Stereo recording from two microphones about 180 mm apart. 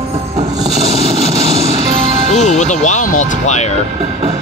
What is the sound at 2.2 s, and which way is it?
Speech, 40° left (ahead or behind).